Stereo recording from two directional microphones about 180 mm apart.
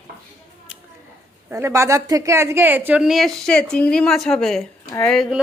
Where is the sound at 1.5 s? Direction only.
15° right (ahead or behind); by 5.3 s 5° left (ahead or behind).